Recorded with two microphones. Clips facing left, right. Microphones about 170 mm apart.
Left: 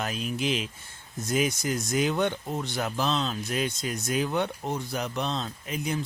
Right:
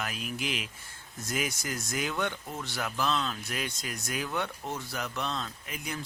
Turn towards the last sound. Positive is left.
turn(degrees=25)  # may be behind; listen again after turning